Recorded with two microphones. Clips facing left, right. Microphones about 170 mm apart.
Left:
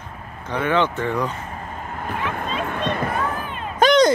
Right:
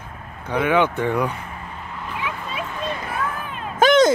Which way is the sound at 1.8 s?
50° left (ahead or behind).